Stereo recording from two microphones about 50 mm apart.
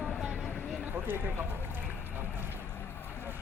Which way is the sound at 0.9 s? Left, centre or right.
Right.